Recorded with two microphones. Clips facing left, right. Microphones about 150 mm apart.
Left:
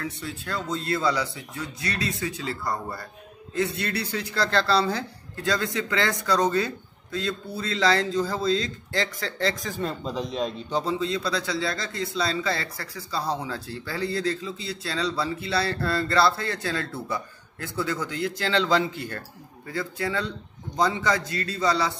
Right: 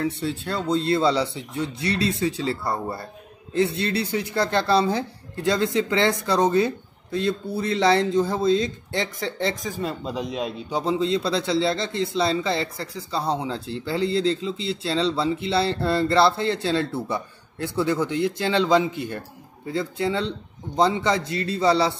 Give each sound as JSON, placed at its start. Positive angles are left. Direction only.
{"t": 0.0, "sound": "a man's voice", "side_deg": -30}
{"t": 9.7, "sound": "speech", "side_deg": -5}
{"t": 10.9, "sound": "a man's voice", "side_deg": -25}